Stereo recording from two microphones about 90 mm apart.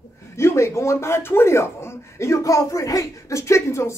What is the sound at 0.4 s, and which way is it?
Speech, 30° left (ahead or behind).